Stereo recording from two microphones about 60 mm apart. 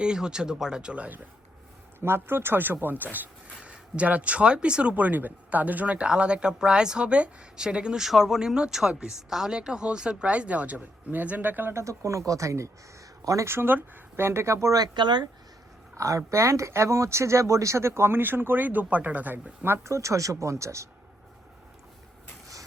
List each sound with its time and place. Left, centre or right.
0.0 s speech: centre
2.0 s speech: right
3.6 s speech: centre
11.7 s speech: right
13.4 s speech: right
16.0 s speech: right
19.8 s speech: right